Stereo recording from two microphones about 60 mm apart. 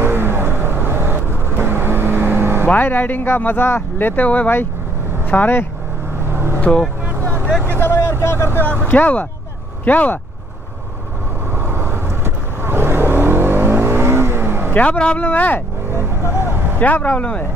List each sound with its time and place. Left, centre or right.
0.0 s vehicle: right
2.7 s speech: left
4.1 s speech: left
6.6 s speech: centre
7.2 s vehicle: right
7.7 s vehicle: left
8.8 s speech: left
11.5 s vehicle: right
14.7 s speech: left
15.9 s vehicle: right
16.8 s speech: left